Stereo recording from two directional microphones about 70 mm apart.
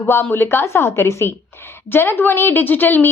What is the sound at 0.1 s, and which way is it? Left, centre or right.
A woman's voice, left.